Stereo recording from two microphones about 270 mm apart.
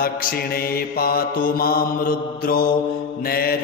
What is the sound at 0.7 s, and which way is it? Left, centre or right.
Mantra, left.